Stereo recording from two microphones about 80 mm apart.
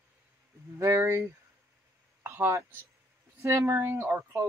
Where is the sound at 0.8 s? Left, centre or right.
Right.